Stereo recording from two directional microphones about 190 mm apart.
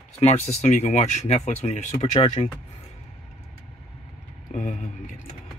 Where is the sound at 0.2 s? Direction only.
35° left (ahead or behind).